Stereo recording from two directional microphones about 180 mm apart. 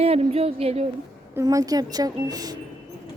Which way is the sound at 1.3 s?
20° right (ahead or behind).